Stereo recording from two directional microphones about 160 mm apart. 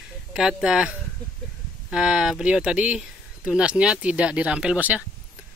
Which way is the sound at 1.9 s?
5° right (ahead or behind).